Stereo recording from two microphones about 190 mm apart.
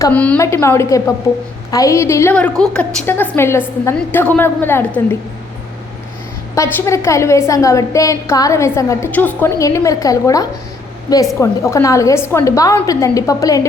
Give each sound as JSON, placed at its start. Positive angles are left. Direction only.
{"t": 0.0, "sound": "a woman's voice", "side_deg": 5}
{"t": 6.5, "sound": "a woman's voice", "side_deg": 15}